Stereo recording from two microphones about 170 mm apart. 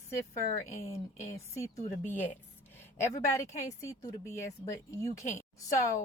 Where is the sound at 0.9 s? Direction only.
35° left (ahead or behind).